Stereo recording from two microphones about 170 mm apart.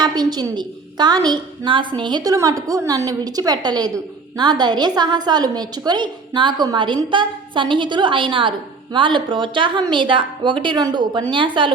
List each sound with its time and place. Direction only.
0.0 s a woman's voice: 25° right (ahead or behind)